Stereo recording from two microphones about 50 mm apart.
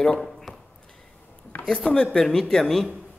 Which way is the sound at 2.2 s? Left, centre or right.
Centre.